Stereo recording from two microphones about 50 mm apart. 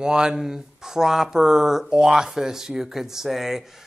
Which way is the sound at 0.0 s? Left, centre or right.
Centre.